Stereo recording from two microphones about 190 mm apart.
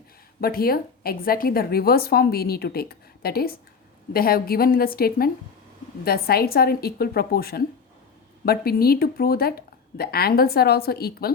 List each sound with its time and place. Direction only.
0.4 s a woman's voice: 50° left (ahead or behind)